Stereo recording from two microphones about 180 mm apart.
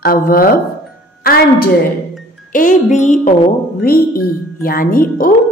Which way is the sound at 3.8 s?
55° left (ahead or behind).